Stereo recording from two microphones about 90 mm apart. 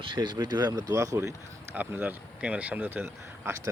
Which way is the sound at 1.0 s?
35° right (ahead or behind).